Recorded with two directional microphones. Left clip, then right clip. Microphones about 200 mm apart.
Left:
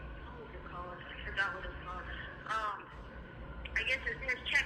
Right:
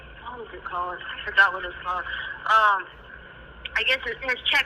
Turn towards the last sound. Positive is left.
turn(degrees=-30)  # may be behind; listen again after turning